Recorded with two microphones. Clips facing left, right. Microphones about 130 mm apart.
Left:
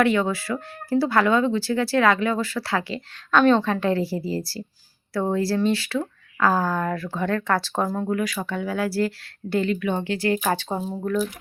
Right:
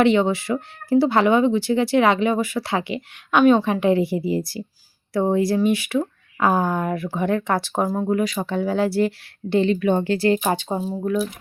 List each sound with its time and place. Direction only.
0.0 s speech: 20° right (ahead or behind)
9.7 s speech: 40° right (ahead or behind); by 11.3 s 10° right (ahead or behind)